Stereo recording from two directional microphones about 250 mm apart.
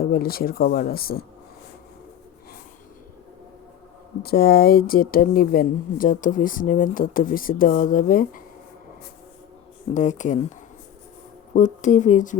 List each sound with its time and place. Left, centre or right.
0.0 s speech: left
4.2 s speech: left
9.9 s speech: left
11.5 s speech: left